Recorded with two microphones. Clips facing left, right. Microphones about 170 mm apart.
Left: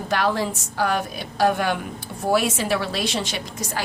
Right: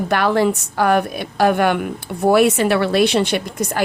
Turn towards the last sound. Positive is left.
turn(degrees=-60)  # may be behind; listen again after turning